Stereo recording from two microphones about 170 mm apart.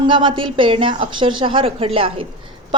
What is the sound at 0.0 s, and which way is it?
A woman's voice, 30° right (ahead or behind).